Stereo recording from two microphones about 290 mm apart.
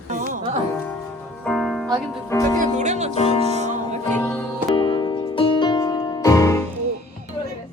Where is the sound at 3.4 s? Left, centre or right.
Right.